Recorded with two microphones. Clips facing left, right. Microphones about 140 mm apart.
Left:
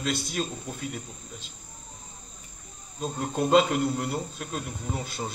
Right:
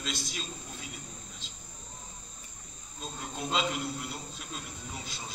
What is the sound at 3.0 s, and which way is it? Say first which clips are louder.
Speech: left 10 dB; 55° left (ahead or behind).